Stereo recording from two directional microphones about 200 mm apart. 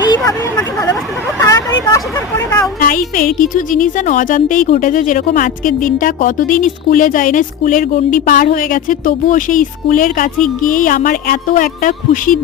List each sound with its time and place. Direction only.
1.4 s hubbub: 15° left (ahead or behind)
2.8 s speech: 40° left (ahead or behind)